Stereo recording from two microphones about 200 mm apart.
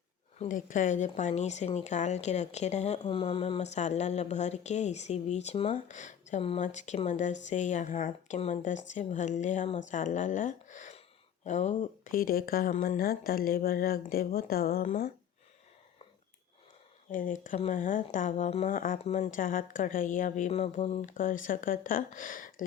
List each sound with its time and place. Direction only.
0.3 s speech: 40° left (ahead or behind)
17.1 s speech: 40° left (ahead or behind)